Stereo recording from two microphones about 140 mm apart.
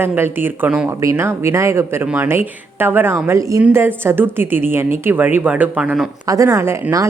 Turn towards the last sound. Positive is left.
turn(degrees=-20)  # may be behind; listen again after turning